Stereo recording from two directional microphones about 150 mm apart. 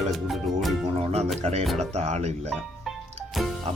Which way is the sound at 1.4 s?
50° right (ahead or behind).